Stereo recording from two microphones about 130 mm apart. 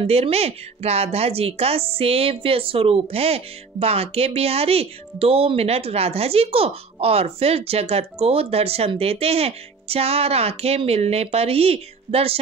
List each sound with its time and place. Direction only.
0.0 s a woman's voice: 50° right (ahead or behind)